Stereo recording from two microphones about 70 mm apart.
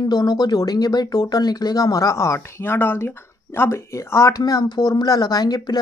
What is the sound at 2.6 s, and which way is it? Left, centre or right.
Speech, left.